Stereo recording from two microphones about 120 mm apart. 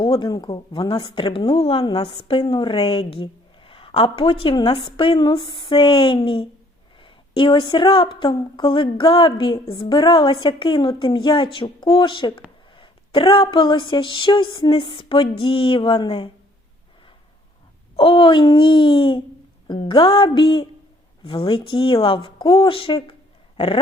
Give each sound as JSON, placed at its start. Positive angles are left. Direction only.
{"t": 0.0, "sound": "a woman's voice", "side_deg": 40}
{"t": 17.9, "sound": "a woman's voice", "side_deg": 45}